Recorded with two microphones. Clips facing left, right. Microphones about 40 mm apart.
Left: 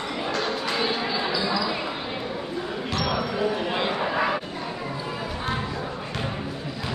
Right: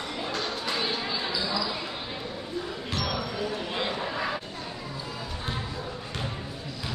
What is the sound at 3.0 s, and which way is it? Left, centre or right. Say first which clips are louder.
Basketball bounce: left 5 dB; centre.